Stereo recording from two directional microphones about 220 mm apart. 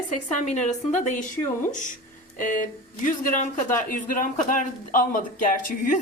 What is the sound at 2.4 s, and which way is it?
Speech, 35° left (ahead or behind).